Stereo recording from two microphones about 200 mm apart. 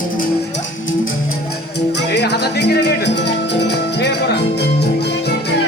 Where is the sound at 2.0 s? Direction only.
60° left (ahead or behind).